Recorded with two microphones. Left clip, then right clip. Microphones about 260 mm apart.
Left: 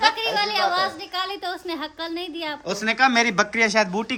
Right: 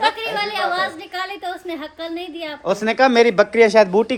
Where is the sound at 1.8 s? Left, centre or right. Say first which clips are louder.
Right 1 dB; left.